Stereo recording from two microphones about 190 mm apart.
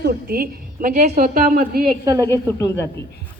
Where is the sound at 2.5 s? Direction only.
15° left (ahead or behind).